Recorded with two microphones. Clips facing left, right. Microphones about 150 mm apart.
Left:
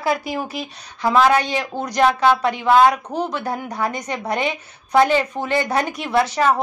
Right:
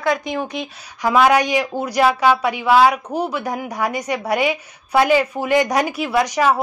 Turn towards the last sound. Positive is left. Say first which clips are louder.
# right 1 dB
turn(degrees=-10)  # may be behind; listen again after turning